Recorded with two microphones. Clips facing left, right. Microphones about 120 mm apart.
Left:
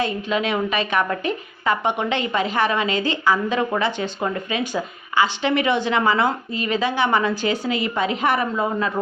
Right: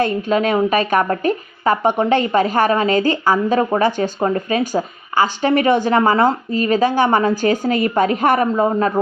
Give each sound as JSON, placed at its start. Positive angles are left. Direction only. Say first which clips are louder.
{"t": 0.0, "sound": "a woman's voice", "louder": "right 6 dB", "side_deg": -45}